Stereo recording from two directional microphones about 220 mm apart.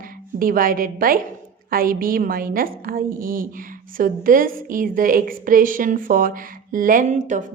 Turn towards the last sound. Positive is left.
turn(degrees=-35)  # may be behind; listen again after turning